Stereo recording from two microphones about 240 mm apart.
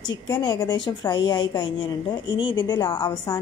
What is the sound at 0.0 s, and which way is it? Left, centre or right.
A woman's voice, centre.